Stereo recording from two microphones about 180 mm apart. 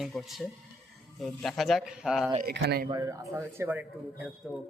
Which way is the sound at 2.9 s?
20° right (ahead or behind).